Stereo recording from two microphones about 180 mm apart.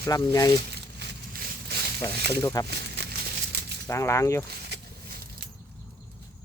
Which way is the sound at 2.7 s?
65° right (ahead or behind).